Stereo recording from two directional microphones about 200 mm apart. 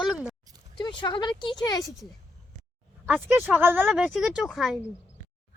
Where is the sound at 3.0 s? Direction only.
10° right (ahead or behind).